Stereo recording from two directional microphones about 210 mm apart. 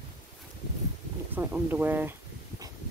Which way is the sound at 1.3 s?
10° right (ahead or behind).